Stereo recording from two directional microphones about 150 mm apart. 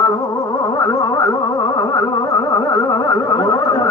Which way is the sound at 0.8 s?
25° left (ahead or behind).